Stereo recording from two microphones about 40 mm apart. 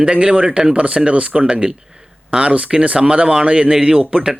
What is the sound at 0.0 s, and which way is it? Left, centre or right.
Speech, right.